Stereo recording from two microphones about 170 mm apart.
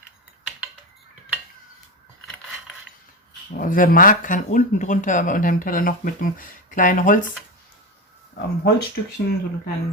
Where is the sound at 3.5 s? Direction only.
55° left (ahead or behind).